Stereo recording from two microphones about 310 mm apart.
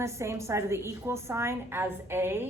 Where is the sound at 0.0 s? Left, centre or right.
Centre.